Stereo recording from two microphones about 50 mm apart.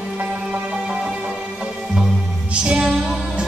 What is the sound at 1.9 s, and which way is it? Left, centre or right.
Music, centre.